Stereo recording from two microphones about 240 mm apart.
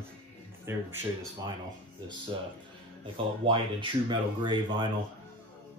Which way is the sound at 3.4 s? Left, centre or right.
Right.